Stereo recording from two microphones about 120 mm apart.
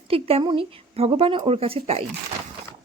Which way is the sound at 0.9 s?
55° right (ahead or behind).